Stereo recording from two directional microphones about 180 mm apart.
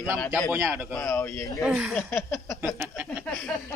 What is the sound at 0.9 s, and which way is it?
Speech, 15° left (ahead or behind).